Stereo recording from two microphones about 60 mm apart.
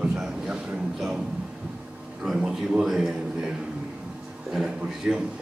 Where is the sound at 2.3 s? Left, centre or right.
Centre.